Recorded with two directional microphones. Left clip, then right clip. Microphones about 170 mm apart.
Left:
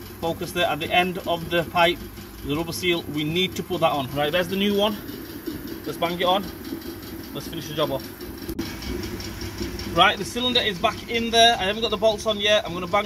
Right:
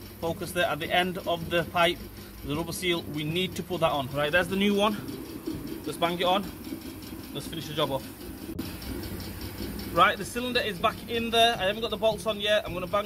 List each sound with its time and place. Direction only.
0.2 s speech: 5° left (ahead or behind)
5.9 s speech: centre (ahead or behind)
9.9 s speech: 10° left (ahead or behind)
12.0 s speech: 20° right (ahead or behind)